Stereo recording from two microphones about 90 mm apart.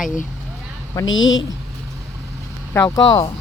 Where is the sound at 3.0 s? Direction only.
45° left (ahead or behind).